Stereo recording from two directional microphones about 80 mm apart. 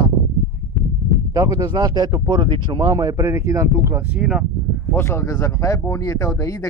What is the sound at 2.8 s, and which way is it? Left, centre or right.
Speech, right.